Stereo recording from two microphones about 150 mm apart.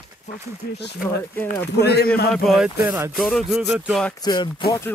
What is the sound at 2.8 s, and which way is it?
Speech, 15° right (ahead or behind).